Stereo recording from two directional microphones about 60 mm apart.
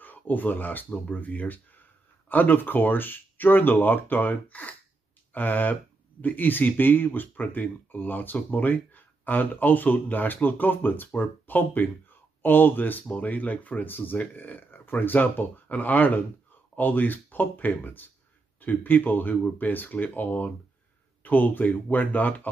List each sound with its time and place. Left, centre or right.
0.0 s speech: left